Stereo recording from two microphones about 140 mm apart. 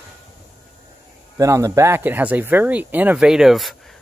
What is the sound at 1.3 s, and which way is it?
Speech, 20° right (ahead or behind).